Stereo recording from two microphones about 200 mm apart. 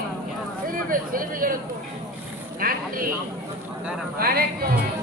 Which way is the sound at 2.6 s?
45° right (ahead or behind).